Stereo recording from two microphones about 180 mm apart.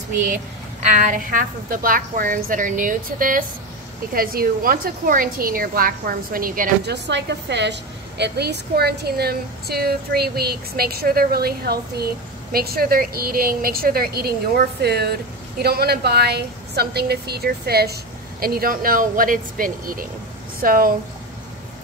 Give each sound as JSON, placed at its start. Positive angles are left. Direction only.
{"t": 0.8, "sound": "a woman's voice", "side_deg": -45}